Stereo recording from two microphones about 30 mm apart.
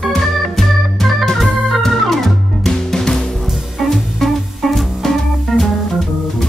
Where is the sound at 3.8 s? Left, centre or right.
Centre.